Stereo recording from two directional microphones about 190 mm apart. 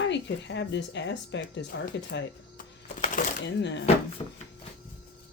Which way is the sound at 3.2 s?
45° left (ahead or behind).